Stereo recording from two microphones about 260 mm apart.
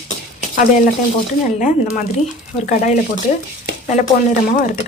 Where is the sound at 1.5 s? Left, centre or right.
Left.